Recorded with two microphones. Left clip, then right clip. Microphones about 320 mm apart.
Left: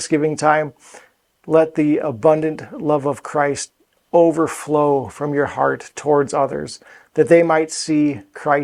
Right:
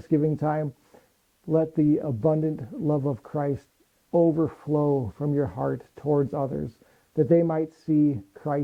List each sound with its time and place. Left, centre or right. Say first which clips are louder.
0.0 s speech: left 8 dB; centre
4.1 s speech: left 8 dB; left
4.4 s speech: left 8 dB; centre